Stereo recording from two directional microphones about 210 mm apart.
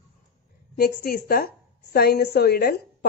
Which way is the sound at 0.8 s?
45° left (ahead or behind).